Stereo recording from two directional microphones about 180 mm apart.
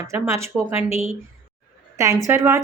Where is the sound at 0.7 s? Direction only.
35° left (ahead or behind).